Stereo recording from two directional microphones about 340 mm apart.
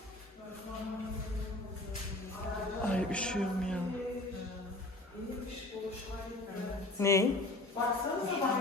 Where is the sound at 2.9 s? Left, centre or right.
Centre.